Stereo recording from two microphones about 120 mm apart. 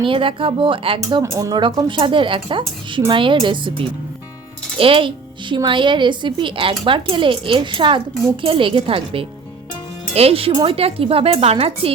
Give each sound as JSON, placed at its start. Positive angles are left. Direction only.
{"t": 0.0, "sound": "speech", "side_deg": -45}
{"t": 1.2, "sound": "speech", "side_deg": -30}
{"t": 1.6, "sound": "speech", "side_deg": -45}